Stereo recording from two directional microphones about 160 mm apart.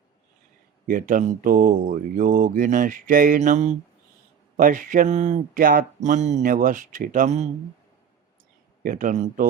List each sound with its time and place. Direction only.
0.9 s speech: 55° right (ahead or behind)
8.8 s speech: 60° right (ahead or behind)